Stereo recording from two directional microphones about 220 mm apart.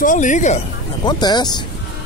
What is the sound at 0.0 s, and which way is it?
Speech, 35° left (ahead or behind).